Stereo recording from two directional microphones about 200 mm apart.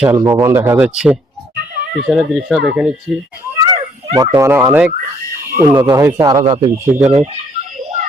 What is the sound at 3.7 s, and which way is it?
Fowl, 25° right (ahead or behind).